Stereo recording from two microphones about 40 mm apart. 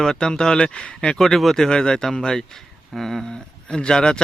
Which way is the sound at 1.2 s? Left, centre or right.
Centre.